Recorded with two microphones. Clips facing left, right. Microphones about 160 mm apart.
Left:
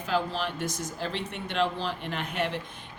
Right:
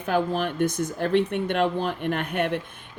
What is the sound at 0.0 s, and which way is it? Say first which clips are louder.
Speech: right 5 dB; 55° right (ahead or behind).